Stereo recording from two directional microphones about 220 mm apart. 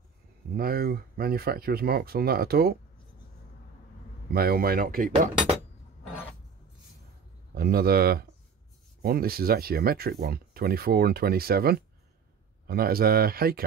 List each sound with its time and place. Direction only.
0.6 s speech: 40° right (ahead or behind)
4.3 s speech: 45° right (ahead or behind)
7.5 s speech: 45° right (ahead or behind)